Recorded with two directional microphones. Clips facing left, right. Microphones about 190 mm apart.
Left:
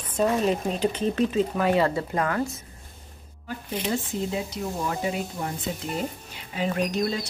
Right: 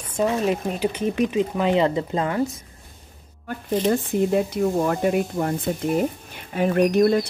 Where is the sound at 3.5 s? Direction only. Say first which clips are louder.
Right 7 dB; 45° right (ahead or behind).